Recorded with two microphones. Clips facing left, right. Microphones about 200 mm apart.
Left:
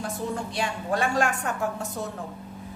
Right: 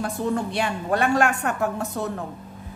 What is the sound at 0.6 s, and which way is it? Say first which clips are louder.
A woman's voice: right 4 dB; 60° right (ahead or behind).